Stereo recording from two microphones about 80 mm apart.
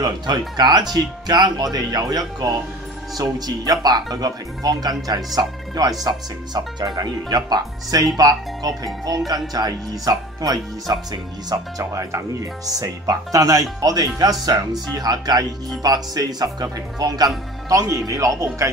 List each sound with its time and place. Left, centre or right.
0.0 s speech: right